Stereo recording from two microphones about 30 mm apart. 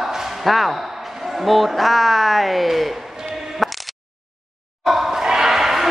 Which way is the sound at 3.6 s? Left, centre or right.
Centre.